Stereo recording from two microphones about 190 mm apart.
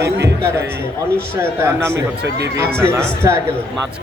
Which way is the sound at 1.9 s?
60° right (ahead or behind).